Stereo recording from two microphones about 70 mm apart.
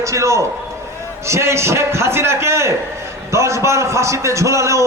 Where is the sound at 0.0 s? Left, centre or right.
Right.